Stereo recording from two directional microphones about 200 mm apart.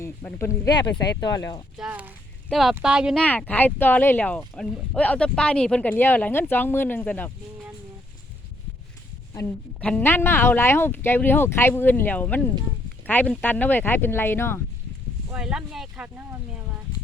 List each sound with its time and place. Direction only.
0.0 s speech: 15° left (ahead or behind)
1.8 s speech: 5° right (ahead or behind)
3.2 s speech: 10° left (ahead or behind)
9.3 s speech: 10° left (ahead or behind)
15.3 s speech: 5° right (ahead or behind)